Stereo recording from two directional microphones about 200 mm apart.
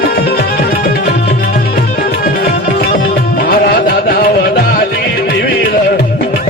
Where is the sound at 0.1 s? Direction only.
50° left (ahead or behind).